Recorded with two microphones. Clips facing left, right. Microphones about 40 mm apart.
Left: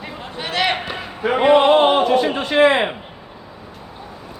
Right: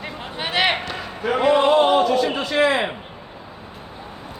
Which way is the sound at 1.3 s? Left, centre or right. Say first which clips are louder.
Left 3 dB; left.